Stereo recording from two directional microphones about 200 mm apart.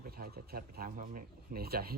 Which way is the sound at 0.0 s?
50° right (ahead or behind).